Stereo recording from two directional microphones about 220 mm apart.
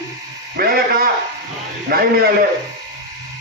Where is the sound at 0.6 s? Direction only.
40° right (ahead or behind).